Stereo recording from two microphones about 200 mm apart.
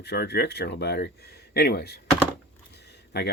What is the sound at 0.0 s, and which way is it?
Speech, 55° left (ahead or behind).